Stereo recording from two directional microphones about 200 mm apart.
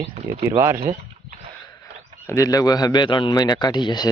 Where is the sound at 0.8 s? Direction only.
30° right (ahead or behind).